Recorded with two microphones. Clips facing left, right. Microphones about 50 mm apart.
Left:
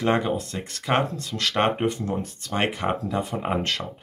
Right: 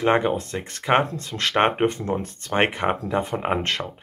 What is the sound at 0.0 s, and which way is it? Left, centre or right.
Speech, right.